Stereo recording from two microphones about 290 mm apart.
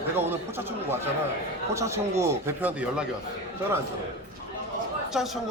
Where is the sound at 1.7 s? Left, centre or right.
Centre.